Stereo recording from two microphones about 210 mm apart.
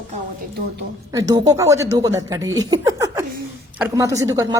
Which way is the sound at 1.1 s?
20° right (ahead or behind).